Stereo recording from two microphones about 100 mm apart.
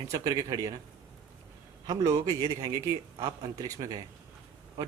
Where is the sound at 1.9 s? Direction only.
35° right (ahead or behind).